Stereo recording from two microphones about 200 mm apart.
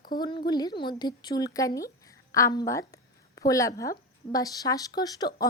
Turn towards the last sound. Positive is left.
turn(degrees=20)  # may be behind; listen again after turning